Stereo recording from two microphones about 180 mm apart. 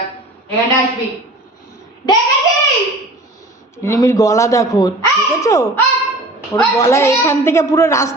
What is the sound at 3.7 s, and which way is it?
A woman's voice, 15° left (ahead or behind).